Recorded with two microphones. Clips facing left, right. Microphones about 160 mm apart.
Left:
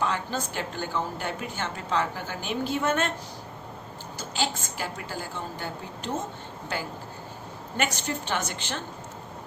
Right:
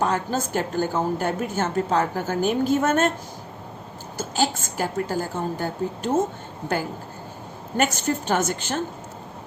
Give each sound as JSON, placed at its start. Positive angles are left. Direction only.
{"t": 0.0, "sound": "a woman's voice", "side_deg": -45}
{"t": 4.2, "sound": "a woman's voice", "side_deg": -45}
{"t": 7.9, "sound": "a woman's voice", "side_deg": -45}